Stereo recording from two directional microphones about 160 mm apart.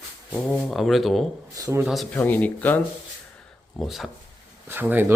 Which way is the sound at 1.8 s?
Centre (ahead or behind).